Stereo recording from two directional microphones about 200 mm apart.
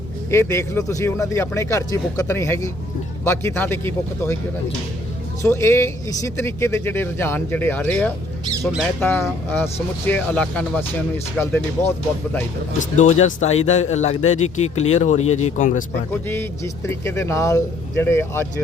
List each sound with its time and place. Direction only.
0.3 s speech: 15° left (ahead or behind)
5.4 s speech: 15° left (ahead or behind)
10.1 s speech: 10° left (ahead or behind)
12.8 s speech: 35° left (ahead or behind)
16.2 s speech: 10° left (ahead or behind)